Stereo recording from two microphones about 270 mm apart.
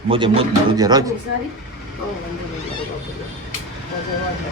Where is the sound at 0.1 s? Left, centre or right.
Centre.